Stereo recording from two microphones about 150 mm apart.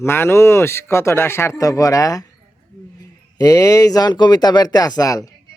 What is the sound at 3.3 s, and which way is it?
Speech, 20° left (ahead or behind).